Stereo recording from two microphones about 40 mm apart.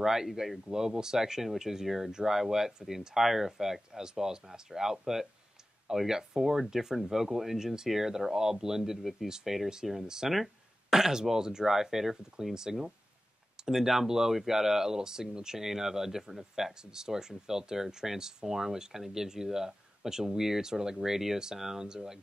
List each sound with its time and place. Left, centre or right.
0.0 s speech: centre
0.7 s speech: centre